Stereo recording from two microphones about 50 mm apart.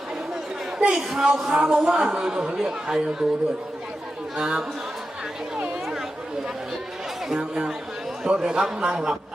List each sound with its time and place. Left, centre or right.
0.8 s speech: centre
4.4 s speech: centre
7.3 s speech: centre